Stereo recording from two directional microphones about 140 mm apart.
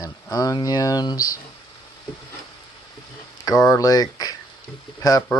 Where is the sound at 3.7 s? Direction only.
25° left (ahead or behind).